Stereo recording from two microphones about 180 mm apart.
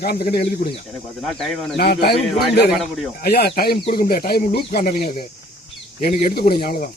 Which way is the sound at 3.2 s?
60° left (ahead or behind).